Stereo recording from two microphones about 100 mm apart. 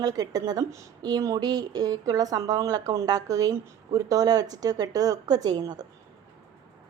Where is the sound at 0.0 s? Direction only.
40° right (ahead or behind).